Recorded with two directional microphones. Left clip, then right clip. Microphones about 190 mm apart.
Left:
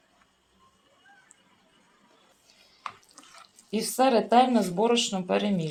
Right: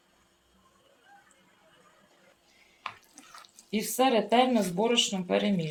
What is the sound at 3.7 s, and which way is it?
Speech, 35° left (ahead or behind).